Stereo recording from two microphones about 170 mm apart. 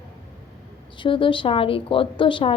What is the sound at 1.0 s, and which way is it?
A woman's voice, 30° left (ahead or behind).